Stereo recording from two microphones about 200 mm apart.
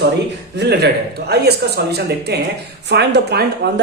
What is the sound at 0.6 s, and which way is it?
Speech, 55° right (ahead or behind).